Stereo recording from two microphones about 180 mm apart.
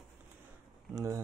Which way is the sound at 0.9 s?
20° right (ahead or behind).